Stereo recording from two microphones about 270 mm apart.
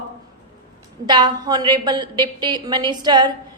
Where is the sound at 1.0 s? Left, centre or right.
Centre.